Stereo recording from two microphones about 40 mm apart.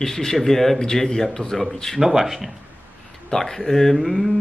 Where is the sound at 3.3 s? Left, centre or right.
Centre.